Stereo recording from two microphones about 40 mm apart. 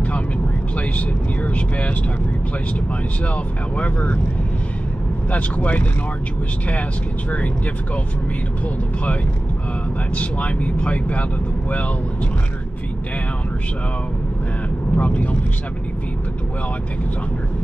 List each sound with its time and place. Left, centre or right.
0.7 s speech: left
3.7 s speech: left
5.3 s speech: left
7.2 s speech: left
10.1 s speech: left
15.0 s speech: left